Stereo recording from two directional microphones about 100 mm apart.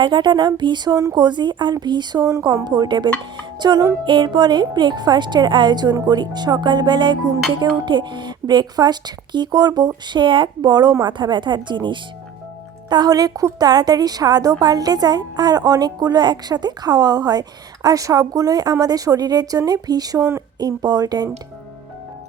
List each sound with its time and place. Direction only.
0.0 s a woman's voice: 50° right (ahead or behind)